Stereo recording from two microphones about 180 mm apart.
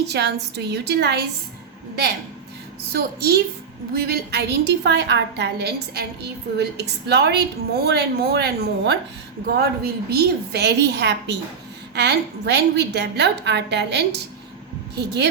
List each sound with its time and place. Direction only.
0.0 s a woman's voice: 65° right (ahead or behind)
2.9 s a woman's voice: 60° right (ahead or behind)